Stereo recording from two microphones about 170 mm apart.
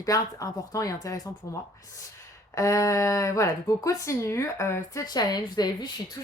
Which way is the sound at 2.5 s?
20° left (ahead or behind).